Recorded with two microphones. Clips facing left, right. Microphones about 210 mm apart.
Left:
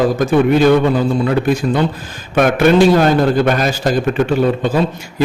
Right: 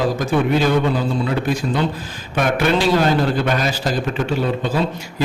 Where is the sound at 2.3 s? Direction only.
50° left (ahead or behind).